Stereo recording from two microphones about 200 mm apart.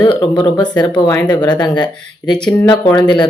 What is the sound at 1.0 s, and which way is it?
Speech, 10° left (ahead or behind).